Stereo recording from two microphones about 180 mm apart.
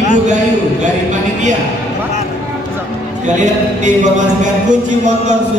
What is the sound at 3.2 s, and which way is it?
Music, 40° right (ahead or behind).